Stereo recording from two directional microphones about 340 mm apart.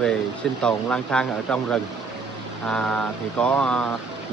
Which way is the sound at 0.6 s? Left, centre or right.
Centre.